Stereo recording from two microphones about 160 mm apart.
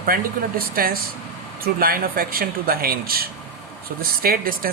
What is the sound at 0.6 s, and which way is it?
Speech, 70° right (ahead or behind).